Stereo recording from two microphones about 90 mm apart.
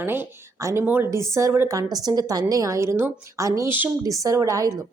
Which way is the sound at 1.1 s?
35° right (ahead or behind).